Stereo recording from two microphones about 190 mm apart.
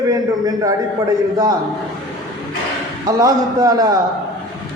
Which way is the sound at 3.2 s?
20° right (ahead or behind).